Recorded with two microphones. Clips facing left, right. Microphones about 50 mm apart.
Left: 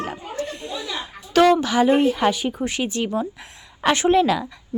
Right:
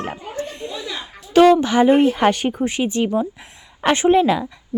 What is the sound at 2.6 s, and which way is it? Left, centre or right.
A woman's voice, right.